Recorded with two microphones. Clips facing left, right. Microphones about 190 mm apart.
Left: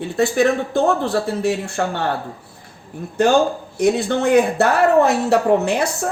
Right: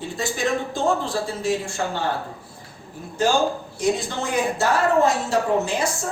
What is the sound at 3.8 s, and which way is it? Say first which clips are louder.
Speech: left 7 dB; 60° left (ahead or behind).